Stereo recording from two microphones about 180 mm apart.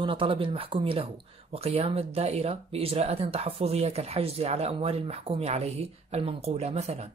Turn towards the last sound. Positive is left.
turn(degrees=-35)  # may be behind; listen again after turning